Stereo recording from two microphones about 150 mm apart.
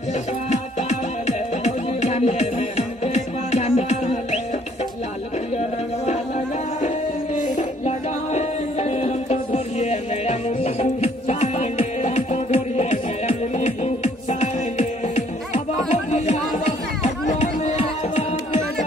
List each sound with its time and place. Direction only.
0.5 s music: 50° left (ahead or behind)
7.3 s music: 50° left (ahead or behind)